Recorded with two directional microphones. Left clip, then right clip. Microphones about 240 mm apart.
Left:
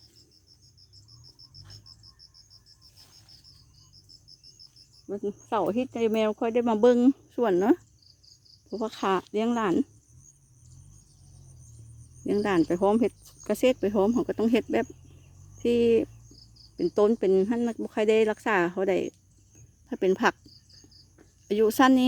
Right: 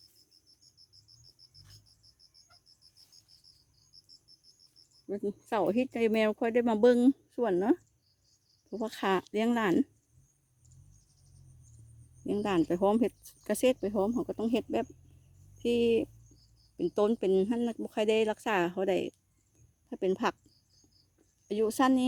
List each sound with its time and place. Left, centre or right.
5.0 s speech: right; by 7.8 s centre
8.7 s speech: centre
12.2 s speech: centre
21.4 s speech: centre